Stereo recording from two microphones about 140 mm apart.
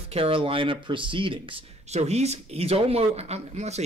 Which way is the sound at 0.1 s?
40° right (ahead or behind).